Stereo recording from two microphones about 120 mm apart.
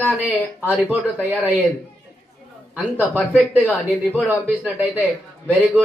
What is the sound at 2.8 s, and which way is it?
Speech, 15° right (ahead or behind).